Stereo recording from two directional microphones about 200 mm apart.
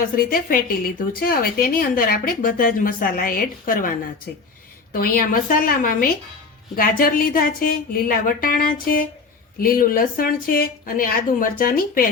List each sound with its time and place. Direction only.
0.3 s a woman's voice: 45° left (ahead or behind)